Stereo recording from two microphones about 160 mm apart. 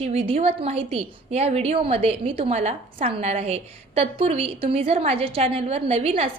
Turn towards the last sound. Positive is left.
turn(degrees=-40)  # may be behind; listen again after turning